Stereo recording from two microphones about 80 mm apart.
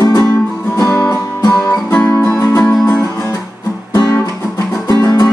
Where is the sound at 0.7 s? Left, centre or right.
Left.